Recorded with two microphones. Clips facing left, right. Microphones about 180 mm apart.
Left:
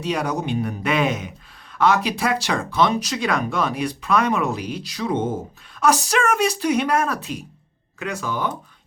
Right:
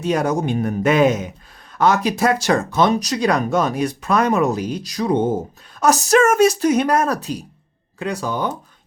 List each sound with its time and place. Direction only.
0.0 s speech: 45° right (ahead or behind)